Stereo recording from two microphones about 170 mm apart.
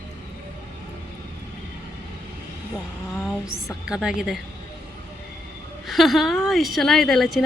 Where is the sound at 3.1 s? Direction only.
Centre (ahead or behind).